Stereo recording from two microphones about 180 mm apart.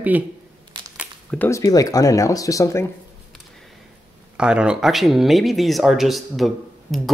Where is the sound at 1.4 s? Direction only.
20° left (ahead or behind).